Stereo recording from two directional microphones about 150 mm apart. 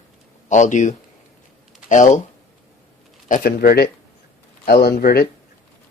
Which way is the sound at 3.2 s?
75° left (ahead or behind).